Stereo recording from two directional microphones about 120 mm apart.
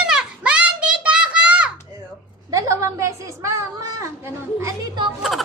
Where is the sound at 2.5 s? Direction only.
25° right (ahead or behind).